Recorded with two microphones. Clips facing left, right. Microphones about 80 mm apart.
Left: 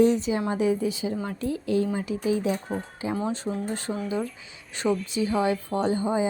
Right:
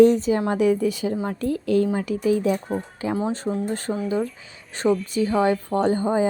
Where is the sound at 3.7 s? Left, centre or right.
Right.